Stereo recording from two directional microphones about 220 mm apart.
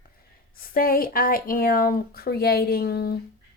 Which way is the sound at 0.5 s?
40° left (ahead or behind).